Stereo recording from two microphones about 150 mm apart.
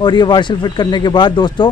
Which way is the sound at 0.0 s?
30° left (ahead or behind).